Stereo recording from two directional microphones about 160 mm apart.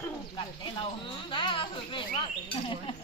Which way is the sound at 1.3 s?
30° left (ahead or behind).